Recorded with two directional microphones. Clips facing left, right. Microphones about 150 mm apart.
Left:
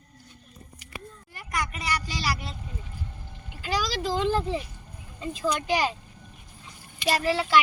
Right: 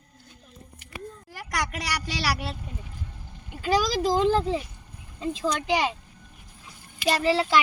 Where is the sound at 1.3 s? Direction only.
90° right; by 2.6 s 70° right (ahead or behind).